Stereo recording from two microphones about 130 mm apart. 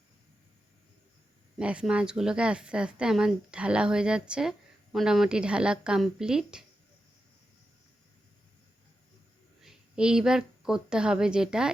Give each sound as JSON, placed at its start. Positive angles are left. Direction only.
{"t": 1.5, "sound": "a woman's voice", "side_deg": -10}
{"t": 9.6, "sound": "a woman's voice", "side_deg": -5}